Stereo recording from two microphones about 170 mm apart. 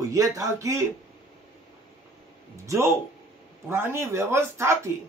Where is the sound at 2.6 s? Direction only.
15° right (ahead or behind).